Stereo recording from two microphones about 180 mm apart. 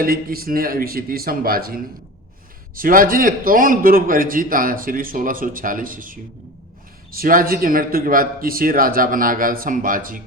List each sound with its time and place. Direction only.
0.0 s a man's voice: 55° right (ahead or behind)